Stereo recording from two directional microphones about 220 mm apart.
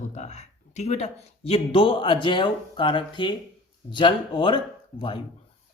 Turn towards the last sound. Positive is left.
turn(degrees=25)  # may be behind; listen again after turning